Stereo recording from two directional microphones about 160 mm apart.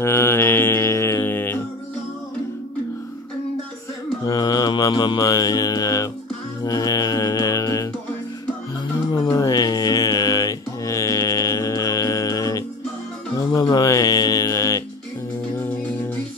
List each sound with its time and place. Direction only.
0.0 s mantra: 15° left (ahead or behind)
4.3 s mantra: 25° left (ahead or behind)
6.6 s music: 25° left (ahead or behind)
9.1 s music: 25° left (ahead or behind)
13.4 s mantra: 25° left (ahead or behind)